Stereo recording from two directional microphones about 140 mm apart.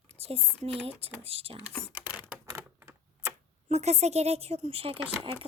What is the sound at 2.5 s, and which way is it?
Typewriter, 20° right (ahead or behind).